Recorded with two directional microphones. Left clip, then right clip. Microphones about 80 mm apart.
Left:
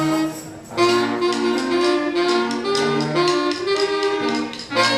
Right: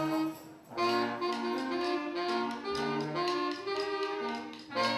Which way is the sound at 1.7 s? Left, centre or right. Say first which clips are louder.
Left 14 dB; left.